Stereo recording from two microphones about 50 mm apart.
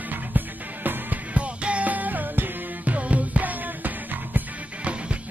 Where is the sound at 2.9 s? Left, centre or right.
Right.